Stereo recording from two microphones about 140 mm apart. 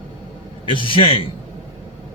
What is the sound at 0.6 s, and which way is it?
Speech, 35° left (ahead or behind).